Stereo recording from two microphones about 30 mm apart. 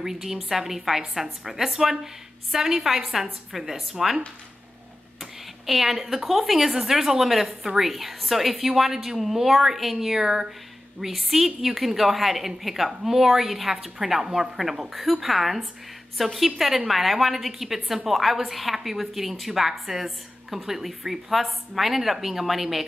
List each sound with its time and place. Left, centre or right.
0.0 s a woman's voice: centre
5.2 s a woman's voice: centre
7.6 s a woman's voice: centre
7.9 s a woman's voice: centre
11.0 s a woman's voice: centre